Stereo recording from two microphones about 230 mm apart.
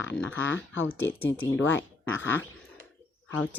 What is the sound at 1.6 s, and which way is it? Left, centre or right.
Speech, left.